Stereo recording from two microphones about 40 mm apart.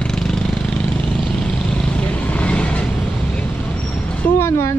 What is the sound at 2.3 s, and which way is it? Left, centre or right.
Vehicle, left.